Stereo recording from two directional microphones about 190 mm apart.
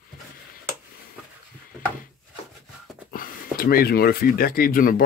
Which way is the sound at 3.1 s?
50° left (ahead or behind).